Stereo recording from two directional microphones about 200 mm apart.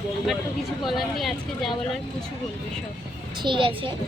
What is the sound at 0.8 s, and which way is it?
Speech, centre (ahead or behind).